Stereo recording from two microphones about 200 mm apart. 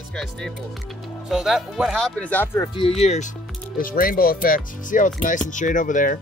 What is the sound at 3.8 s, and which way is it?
Speech, 45° left (ahead or behind).